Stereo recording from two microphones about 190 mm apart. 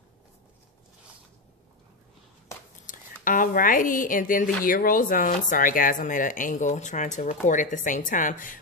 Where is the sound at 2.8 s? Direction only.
45° left (ahead or behind).